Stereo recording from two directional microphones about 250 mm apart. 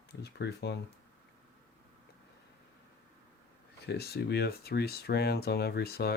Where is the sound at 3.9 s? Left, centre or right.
Left.